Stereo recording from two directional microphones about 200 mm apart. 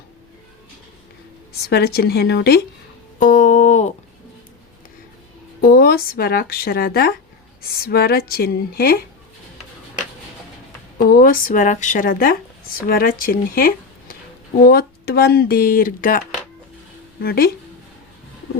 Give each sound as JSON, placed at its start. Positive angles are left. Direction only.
{"t": 1.6, "sound": "speech", "side_deg": 50}
{"t": 3.2, "sound": "a sound", "side_deg": 40}
{"t": 5.6, "sound": "speech", "side_deg": 50}
{"t": 10.9, "sound": "speech", "side_deg": 45}